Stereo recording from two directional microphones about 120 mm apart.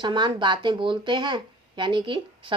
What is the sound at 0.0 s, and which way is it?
A woman's voice, 40° right (ahead or behind).